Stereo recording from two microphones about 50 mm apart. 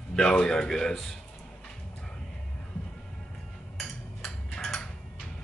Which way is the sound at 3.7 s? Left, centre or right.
Centre.